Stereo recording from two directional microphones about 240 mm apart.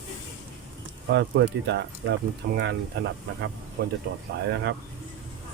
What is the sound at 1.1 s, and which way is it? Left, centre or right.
Speech, right.